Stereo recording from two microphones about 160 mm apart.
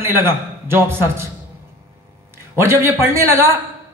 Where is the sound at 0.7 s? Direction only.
15° right (ahead or behind).